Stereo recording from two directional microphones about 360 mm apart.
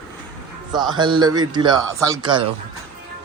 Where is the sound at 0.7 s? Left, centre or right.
Centre.